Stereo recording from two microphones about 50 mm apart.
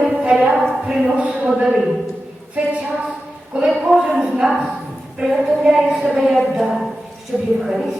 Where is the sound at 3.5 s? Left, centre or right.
Right.